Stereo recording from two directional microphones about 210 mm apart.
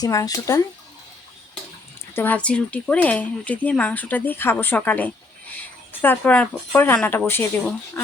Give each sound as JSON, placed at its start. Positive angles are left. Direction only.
{"t": 0.0, "sound": "speech", "side_deg": 15}
{"t": 2.1, "sound": "speech", "side_deg": 10}